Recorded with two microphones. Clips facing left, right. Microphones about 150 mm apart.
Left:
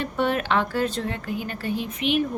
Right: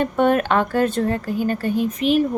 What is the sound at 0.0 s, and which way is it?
A woman's voice, 50° right (ahead or behind).